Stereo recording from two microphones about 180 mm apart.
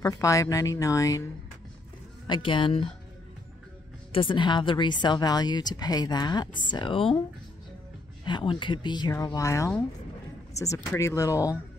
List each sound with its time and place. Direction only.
0.0 s speech: 20° left (ahead or behind)
2.2 s speech: 25° left (ahead or behind)
4.1 s speech: 30° left (ahead or behind)
8.3 s speech: 25° left (ahead or behind)